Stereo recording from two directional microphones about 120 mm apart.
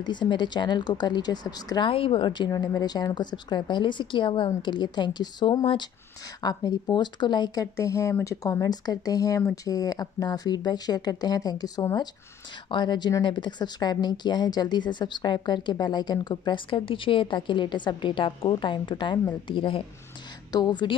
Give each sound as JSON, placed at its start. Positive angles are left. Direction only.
{"t": 0.0, "sound": "a woman's voice", "side_deg": 40}
{"t": 1.9, "sound": "a woman's voice", "side_deg": 50}